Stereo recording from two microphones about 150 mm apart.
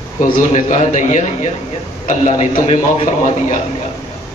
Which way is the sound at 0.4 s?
50° left (ahead or behind).